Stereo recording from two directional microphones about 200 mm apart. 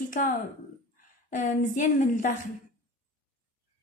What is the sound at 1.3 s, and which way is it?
A woman's voice, 40° left (ahead or behind).